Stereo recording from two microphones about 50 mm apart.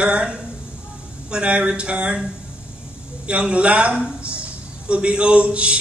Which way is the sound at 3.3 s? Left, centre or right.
Right.